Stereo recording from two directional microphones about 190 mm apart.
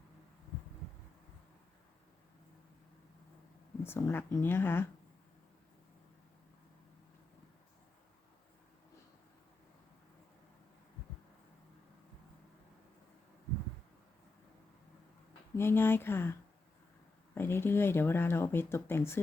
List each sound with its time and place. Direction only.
3.8 s speech: 10° left (ahead or behind)
15.5 s speech: 10° left (ahead or behind)